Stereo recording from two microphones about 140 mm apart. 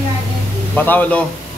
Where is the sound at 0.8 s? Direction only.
10° left (ahead or behind).